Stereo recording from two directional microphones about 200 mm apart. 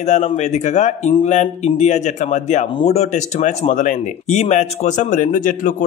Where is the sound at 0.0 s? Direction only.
35° left (ahead or behind).